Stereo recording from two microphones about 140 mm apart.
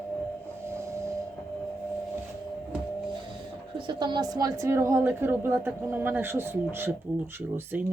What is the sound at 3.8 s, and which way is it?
A woman's voice, 30° right (ahead or behind).